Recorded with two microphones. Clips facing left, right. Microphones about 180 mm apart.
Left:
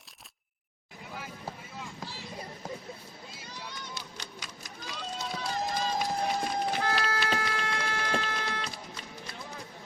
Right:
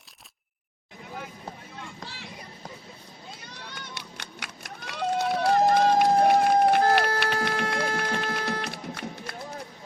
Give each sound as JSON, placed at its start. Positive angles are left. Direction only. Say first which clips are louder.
{"t": 2.0, "sound": "a sound", "louder": "right 1 dB", "side_deg": -70}
{"t": 3.4, "sound": "run", "louder": "left 3 dB", "side_deg": -65}
{"t": 7.8, "sound": "music", "louder": "right 4 dB", "side_deg": -45}